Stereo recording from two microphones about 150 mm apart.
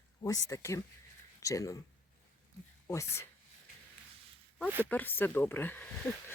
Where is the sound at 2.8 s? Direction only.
20° left (ahead or behind).